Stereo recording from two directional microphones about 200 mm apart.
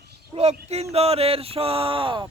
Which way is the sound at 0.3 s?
30° right (ahead or behind).